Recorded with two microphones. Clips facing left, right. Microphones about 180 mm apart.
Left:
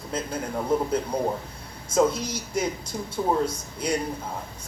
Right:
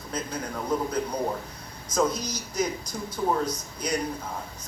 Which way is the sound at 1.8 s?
25° left (ahead or behind).